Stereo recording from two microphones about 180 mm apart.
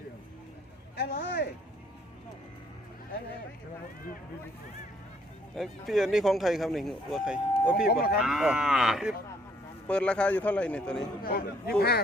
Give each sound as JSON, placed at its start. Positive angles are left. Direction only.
{"t": 0.9, "sound": "speech", "side_deg": 60}
{"t": 5.5, "sound": "speech", "side_deg": 0}
{"t": 7.9, "sound": "a man's voice", "side_deg": 55}
{"t": 8.2, "sound": "a man's voice", "side_deg": 0}
{"t": 11.2, "sound": "a man's voice", "side_deg": 55}